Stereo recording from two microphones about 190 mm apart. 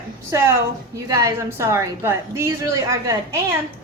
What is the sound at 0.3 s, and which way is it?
A woman's voice, 15° right (ahead or behind).